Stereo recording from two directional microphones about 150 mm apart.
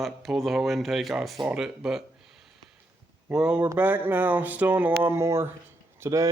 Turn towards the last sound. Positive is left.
turn(degrees=-20)  # may be behind; listen again after turning